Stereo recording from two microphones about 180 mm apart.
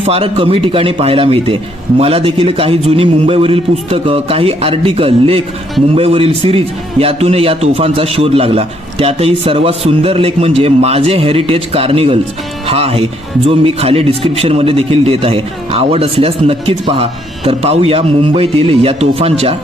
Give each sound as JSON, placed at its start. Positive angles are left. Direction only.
{"t": 0.0, "sound": "speech", "side_deg": -30}